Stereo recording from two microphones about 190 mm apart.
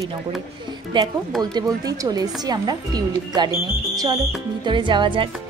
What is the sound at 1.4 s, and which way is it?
A woman's voice, 20° right (ahead or behind).